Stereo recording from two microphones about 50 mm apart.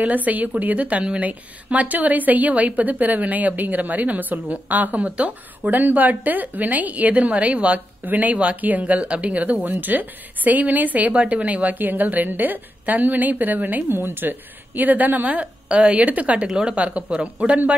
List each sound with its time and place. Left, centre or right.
0.0 s a woman's voice: right
16.4 s speech: centre